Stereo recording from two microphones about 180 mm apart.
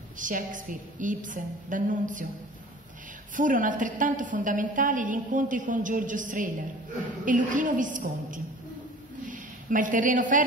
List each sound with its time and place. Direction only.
0.2 s a woman's voice: 45° right (ahead or behind)
3.3 s a woman's voice: 45° right (ahead or behind)
9.2 s a sound: 45° right (ahead or behind)